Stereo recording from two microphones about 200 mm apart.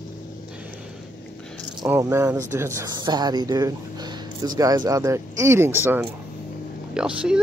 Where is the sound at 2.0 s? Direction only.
15° right (ahead or behind).